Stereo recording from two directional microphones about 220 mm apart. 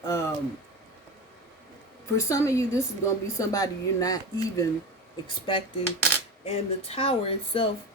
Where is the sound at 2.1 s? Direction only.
15° left (ahead or behind).